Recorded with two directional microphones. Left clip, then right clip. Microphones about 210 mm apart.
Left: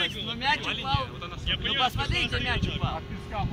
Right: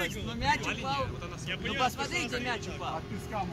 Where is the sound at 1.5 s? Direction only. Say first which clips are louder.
Left 6 dB; 10° right (ahead or behind).